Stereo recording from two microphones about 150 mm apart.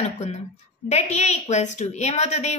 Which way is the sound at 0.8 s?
50° left (ahead or behind).